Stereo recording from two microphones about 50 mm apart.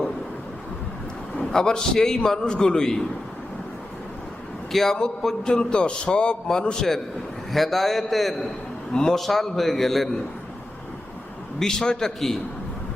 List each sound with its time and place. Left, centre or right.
1.5 s a man's voice: centre
4.7 s a man's voice: centre
7.5 s a man's voice: centre
8.9 s a man's voice: centre
11.6 s a man's voice: centre